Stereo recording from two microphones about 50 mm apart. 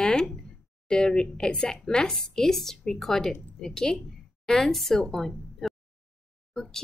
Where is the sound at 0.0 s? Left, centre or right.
Centre.